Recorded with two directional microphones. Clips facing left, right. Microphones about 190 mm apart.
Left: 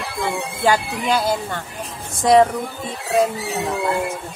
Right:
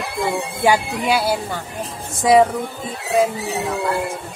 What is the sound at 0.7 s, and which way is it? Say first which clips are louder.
Speech: right 1 dB; 10° right (ahead or behind).